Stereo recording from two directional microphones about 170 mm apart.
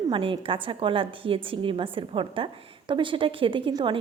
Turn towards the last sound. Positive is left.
turn(degrees=-30)  # may be behind; listen again after turning